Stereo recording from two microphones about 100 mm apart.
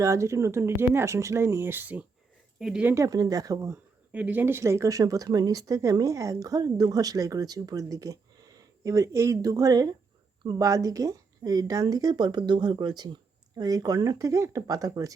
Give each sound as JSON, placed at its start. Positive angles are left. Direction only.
{"t": 0.0, "sound": "speech", "side_deg": -30}
{"t": 2.6, "sound": "speech", "side_deg": -5}
{"t": 2.9, "sound": "speech", "side_deg": -35}
{"t": 4.1, "sound": "speech", "side_deg": -15}